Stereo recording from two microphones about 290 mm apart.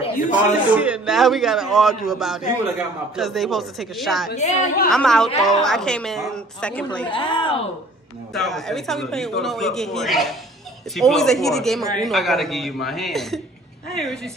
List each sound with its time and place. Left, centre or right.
0.0 s a man's voice: left
0.7 s speech: centre
4.3 s a woman's voice: left
4.9 s speech: centre
7.1 s speech: centre
8.3 s speech: centre